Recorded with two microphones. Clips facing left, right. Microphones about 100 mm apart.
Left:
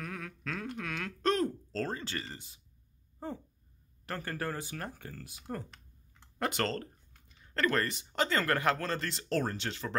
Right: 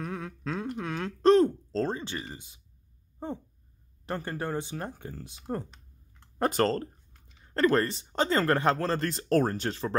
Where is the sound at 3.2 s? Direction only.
20° right (ahead or behind).